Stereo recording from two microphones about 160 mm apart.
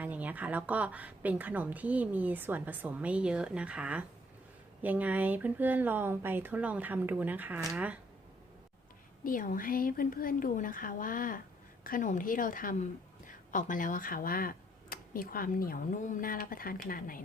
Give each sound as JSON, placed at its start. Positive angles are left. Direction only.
{"t": 0.0, "sound": "a woman's voice", "side_deg": -10}
{"t": 9.2, "sound": "a woman's voice", "side_deg": 60}